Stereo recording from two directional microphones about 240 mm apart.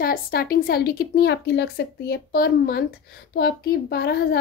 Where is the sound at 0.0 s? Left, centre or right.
Left.